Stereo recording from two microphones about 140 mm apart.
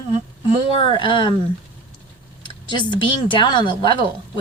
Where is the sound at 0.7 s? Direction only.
40° left (ahead or behind).